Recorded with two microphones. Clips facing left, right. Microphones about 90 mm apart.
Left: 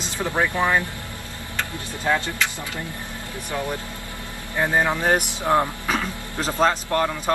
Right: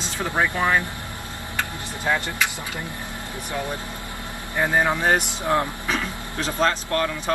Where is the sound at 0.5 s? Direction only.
15° left (ahead or behind).